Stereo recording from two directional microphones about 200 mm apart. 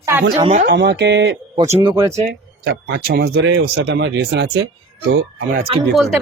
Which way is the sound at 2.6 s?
55° right (ahead or behind).